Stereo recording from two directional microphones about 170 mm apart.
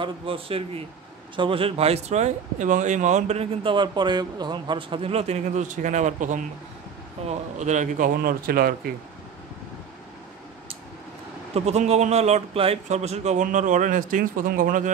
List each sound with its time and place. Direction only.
0.0 s a man's voice: 35° right (ahead or behind); by 8.7 s 60° right (ahead or behind)
11.5 s a man's voice: 40° right (ahead or behind)